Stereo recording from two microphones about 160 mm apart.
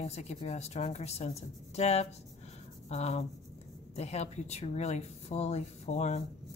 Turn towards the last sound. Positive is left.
turn(degrees=45)  # may be behind; listen again after turning